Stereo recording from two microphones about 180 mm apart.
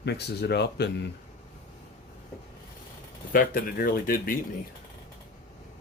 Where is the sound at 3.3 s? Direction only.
55° left (ahead or behind).